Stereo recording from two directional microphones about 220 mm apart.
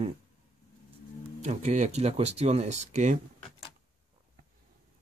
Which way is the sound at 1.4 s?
30° right (ahead or behind).